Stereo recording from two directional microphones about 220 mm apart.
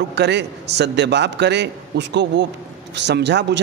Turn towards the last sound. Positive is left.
turn(degrees=-50)  # may be behind; listen again after turning